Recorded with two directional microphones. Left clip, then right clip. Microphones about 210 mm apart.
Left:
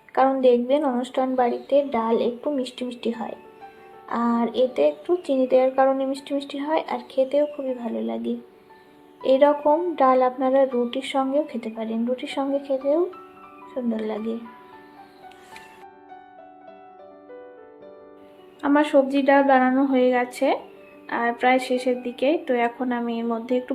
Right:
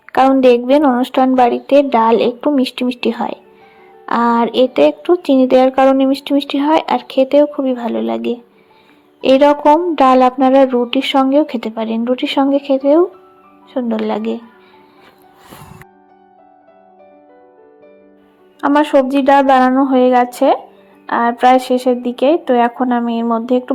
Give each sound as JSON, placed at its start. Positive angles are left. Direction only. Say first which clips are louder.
{"t": 0.1, "sound": "speech", "louder": "right 8 dB", "side_deg": -35}
{"t": 18.6, "sound": "speech", "louder": "right 7 dB", "side_deg": -20}